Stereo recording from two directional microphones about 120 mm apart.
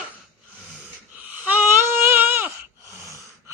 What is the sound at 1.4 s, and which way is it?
Baby cry, 15° right (ahead or behind).